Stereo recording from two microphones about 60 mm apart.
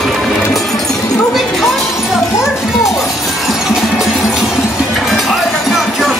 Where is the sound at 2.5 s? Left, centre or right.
Centre.